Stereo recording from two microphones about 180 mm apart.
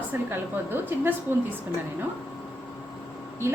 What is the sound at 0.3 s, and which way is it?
A woman's voice, 10° right (ahead or behind).